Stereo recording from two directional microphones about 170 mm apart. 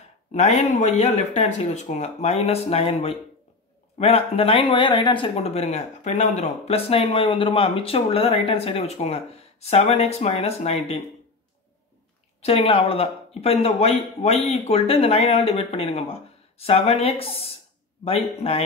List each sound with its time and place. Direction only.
0.3 s speech: 40° left (ahead or behind)
12.4 s speech: 35° left (ahead or behind)